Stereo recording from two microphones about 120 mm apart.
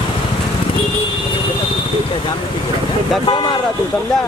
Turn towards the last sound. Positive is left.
turn(degrees=40)  # may be behind; listen again after turning